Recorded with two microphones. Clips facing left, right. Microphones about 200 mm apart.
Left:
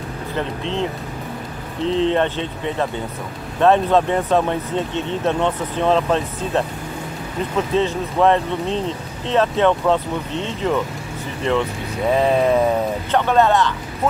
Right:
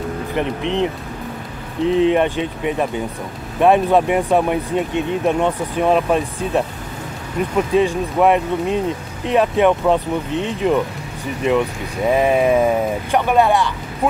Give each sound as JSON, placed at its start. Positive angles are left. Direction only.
{"t": 0.4, "sound": "speech", "side_deg": -15}
{"t": 1.9, "sound": "speech", "side_deg": -15}